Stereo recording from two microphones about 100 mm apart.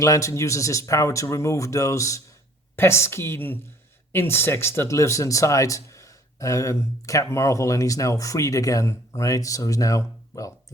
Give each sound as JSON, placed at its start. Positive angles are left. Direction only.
{"t": 0.0, "sound": "a woman's voice", "side_deg": 30}